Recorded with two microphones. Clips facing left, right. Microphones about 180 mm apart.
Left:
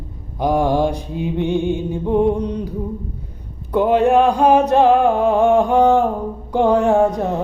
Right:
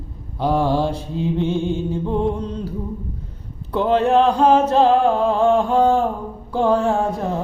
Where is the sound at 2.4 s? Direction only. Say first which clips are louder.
Left 4 dB; 15° left (ahead or behind).